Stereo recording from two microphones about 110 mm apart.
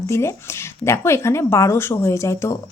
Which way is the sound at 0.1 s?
25° left (ahead or behind).